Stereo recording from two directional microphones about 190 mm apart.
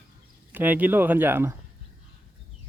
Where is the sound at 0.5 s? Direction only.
10° right (ahead or behind).